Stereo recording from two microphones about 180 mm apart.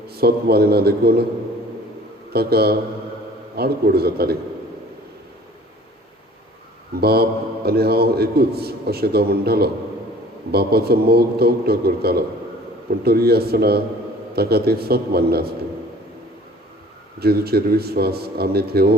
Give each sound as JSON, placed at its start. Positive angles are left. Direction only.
{"t": 0.1, "sound": "a man's voice", "side_deg": -60}
{"t": 2.3, "sound": "a man's voice", "side_deg": -60}
{"t": 6.9, "sound": "a man's voice", "side_deg": -60}
{"t": 17.2, "sound": "a man's voice", "side_deg": -60}